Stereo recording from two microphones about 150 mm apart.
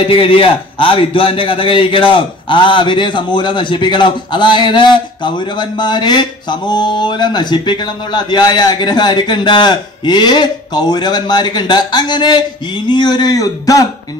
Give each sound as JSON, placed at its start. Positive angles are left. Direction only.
{"t": 0.1, "sound": "a man's voice", "side_deg": 35}